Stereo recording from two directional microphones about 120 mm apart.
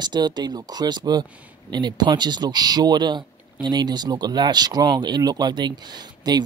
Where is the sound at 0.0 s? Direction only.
35° right (ahead or behind).